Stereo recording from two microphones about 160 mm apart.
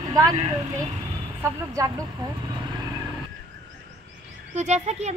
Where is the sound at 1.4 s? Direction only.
20° right (ahead or behind).